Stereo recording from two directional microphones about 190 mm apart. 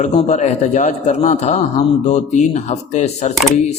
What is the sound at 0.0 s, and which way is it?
A man's voice, 40° left (ahead or behind).